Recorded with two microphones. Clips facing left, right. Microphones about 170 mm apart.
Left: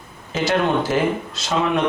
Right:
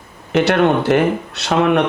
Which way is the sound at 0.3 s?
65° right (ahead or behind).